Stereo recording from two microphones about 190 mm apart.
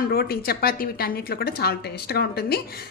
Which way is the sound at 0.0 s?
55° left (ahead or behind).